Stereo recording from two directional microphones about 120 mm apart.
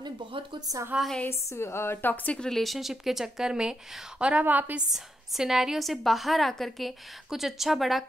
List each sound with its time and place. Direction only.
0.0 s speech: 45° right (ahead or behind)
0.9 s a woman's voice: centre (ahead or behind)
1.2 s a woman's voice: 20° left (ahead or behind)
2.3 s a woman's voice: 5° left (ahead or behind); by 4.8 s 15° right (ahead or behind)
4.9 s a woman's voice: 5° right (ahead or behind)